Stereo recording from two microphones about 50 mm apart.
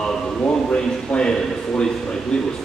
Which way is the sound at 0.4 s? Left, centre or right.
Left.